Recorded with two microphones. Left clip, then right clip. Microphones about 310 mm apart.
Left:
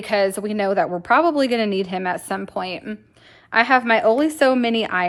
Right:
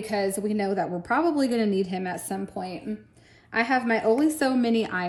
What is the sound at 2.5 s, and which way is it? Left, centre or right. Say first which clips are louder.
Speech: left 8 dB; left.